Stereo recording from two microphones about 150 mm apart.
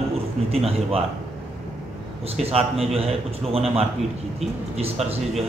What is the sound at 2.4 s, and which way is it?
A man's voice, 40° right (ahead or behind).